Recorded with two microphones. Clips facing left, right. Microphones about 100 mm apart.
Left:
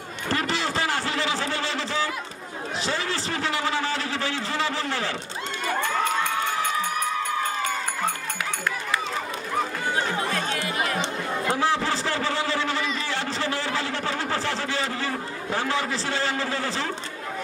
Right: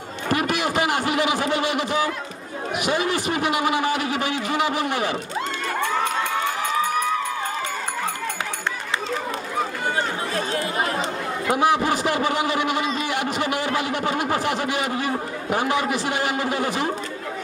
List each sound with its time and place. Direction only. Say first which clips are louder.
0.3 s a man's voice: right 4 dB; 15° right (ahead or behind)
10.3 s chatter: right 3 dB; 35° right (ahead or behind)
11.5 s a man's voice: right 6 dB; 15° right (ahead or behind)